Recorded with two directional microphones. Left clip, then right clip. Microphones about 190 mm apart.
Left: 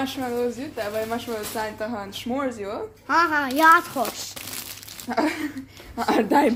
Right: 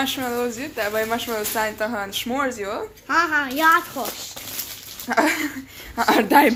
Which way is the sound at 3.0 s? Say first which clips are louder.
Even; 55° left (ahead or behind).